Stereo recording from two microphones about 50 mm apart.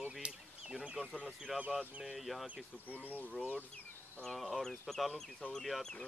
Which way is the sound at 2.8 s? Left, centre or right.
Left.